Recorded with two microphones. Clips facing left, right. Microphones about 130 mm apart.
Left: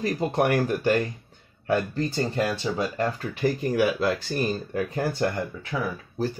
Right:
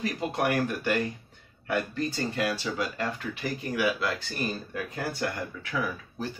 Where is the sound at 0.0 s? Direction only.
35° left (ahead or behind).